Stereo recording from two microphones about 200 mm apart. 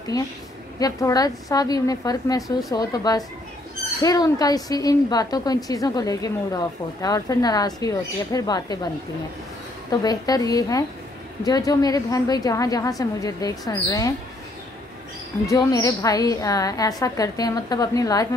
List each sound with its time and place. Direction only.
0.1 s a woman's voice: 20° left (ahead or behind)
9.8 s a woman's voice: 20° left (ahead or behind)
15.4 s a woman's voice: 15° left (ahead or behind)